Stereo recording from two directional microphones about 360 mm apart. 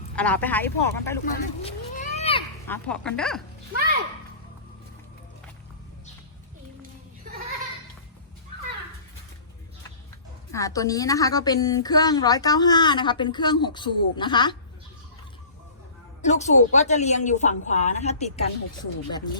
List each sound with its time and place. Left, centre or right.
0.2 s speech: centre
1.2 s speech: centre
2.6 s speech: centre
10.5 s a woman's voice: centre
16.2 s a woman's voice: centre